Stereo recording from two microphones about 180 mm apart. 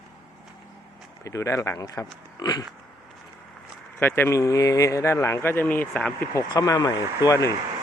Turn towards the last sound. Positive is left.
turn(degrees=20)  # may be behind; listen again after turning